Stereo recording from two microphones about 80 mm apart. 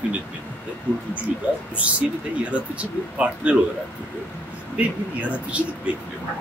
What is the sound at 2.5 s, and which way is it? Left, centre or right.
Speech, centre.